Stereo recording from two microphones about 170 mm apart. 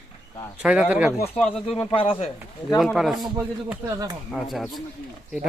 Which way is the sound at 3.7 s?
15° right (ahead or behind).